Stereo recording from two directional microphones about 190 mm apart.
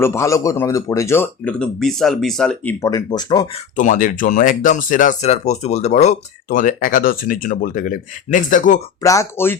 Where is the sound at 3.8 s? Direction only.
45° left (ahead or behind).